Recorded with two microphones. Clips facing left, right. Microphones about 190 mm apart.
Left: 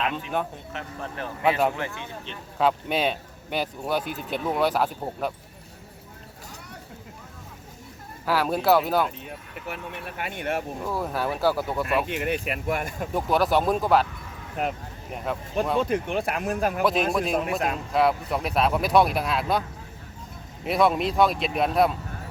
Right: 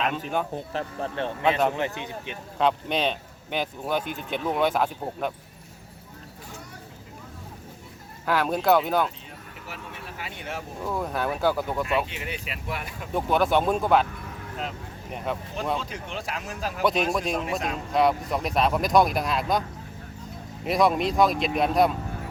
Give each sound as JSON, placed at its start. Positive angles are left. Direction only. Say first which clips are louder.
{"t": 0.5, "sound": "speech", "louder": "right 6 dB", "side_deg": -35}
{"t": 1.5, "sound": "speech", "louder": "left 1 dB", "side_deg": 10}
{"t": 2.0, "sound": "speech", "louder": "right 2 dB", "side_deg": -10}
{"t": 2.6, "sound": "speech", "louder": "left 1 dB", "side_deg": 5}
{"t": 8.2, "sound": "speech", "louder": "even", "side_deg": 5}
{"t": 9.6, "sound": "speech", "louder": "left 5 dB", "side_deg": 60}
{"t": 10.8, "sound": "speech", "louder": "right 2 dB", "side_deg": 0}
{"t": 12.0, "sound": "speech", "louder": "left 8 dB", "side_deg": 55}
{"t": 13.1, "sound": "speech", "louder": "even", "side_deg": 0}
{"t": 14.5, "sound": "speech", "louder": "left 6 dB", "side_deg": 55}
{"t": 15.1, "sound": "speech", "louder": "even", "side_deg": 0}
{"t": 15.8, "sound": "speech", "louder": "left 10 dB", "side_deg": 55}
{"t": 16.8, "sound": "speech", "louder": "right 2 dB", "side_deg": 0}
{"t": 20.7, "sound": "speech", "louder": "even", "side_deg": 0}